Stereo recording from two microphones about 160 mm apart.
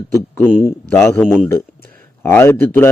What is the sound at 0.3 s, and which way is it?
A man's voice, 10° left (ahead or behind).